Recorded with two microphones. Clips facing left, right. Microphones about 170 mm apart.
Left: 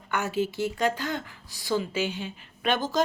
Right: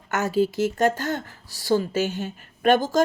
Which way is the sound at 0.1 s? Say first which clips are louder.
Right 5 dB; 40° right (ahead or behind).